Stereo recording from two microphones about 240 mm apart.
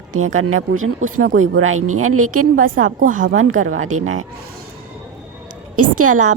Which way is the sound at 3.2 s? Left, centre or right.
Right.